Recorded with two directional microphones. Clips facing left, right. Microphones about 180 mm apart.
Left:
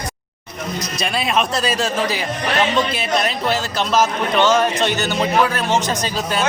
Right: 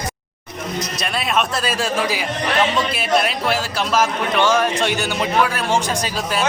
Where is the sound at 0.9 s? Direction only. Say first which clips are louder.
Left 2 dB; centre (ahead or behind).